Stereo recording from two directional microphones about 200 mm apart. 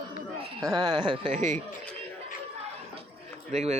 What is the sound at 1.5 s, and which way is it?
Speech, 5° left (ahead or behind).